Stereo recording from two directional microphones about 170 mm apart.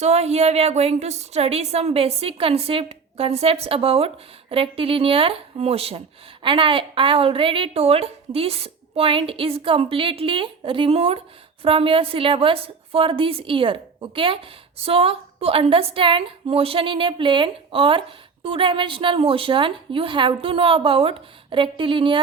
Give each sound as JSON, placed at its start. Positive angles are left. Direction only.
{"t": 0.0, "sound": "a woman's voice", "side_deg": -40}